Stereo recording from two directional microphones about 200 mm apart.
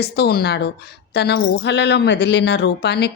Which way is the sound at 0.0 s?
55° left (ahead or behind).